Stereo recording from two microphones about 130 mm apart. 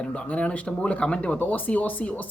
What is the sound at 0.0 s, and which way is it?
Speech, 10° left (ahead or behind).